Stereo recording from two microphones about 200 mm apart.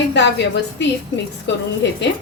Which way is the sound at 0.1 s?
60° left (ahead or behind).